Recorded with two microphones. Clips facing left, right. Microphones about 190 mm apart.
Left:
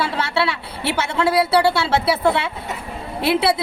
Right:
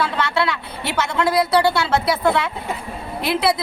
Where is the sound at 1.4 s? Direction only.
5° left (ahead or behind).